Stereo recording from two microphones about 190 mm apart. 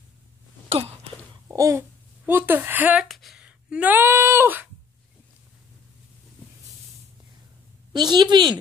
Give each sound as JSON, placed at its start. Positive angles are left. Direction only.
{"t": 0.7, "sound": "a sound", "side_deg": -30}
{"t": 1.5, "sound": "speech", "side_deg": -15}
{"t": 7.9, "sound": "a woman's voice", "side_deg": -20}